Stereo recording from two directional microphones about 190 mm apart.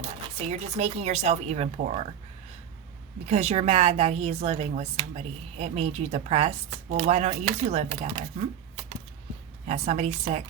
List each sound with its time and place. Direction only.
0.3 s a woman's voice: 35° right (ahead or behind)
3.2 s a woman's voice: 35° right (ahead or behind)